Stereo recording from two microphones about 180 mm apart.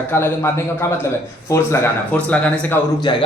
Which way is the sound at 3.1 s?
25° left (ahead or behind).